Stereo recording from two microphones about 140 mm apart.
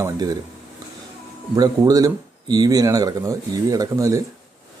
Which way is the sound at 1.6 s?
25° right (ahead or behind).